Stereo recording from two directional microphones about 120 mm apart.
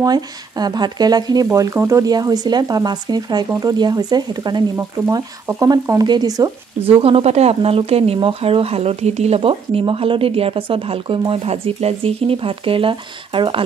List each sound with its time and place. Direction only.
0.0 s speech: 35° right (ahead or behind)
4.7 s speech: 25° right (ahead or behind)
6.9 s speech: 50° right (ahead or behind)